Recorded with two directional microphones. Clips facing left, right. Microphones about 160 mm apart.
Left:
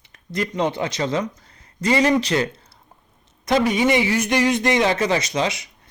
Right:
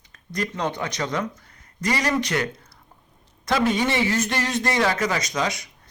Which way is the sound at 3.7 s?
15° left (ahead or behind).